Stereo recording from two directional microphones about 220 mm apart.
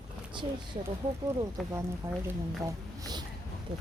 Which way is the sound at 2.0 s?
10° right (ahead or behind).